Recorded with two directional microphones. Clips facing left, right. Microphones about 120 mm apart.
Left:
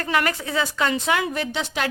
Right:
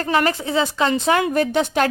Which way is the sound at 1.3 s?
50° right (ahead or behind).